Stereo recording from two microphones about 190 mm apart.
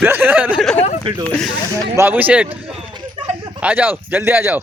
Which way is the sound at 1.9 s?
10° right (ahead or behind).